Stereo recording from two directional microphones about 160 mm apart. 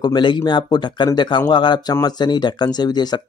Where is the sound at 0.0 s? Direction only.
30° left (ahead or behind).